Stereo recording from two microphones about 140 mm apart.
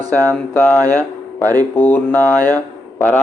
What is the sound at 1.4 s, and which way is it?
Speech, 25° right (ahead or behind).